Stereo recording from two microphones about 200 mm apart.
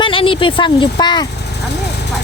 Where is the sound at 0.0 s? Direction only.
25° left (ahead or behind).